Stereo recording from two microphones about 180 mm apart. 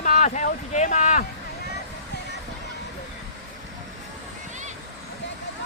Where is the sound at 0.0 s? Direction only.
45° left (ahead or behind).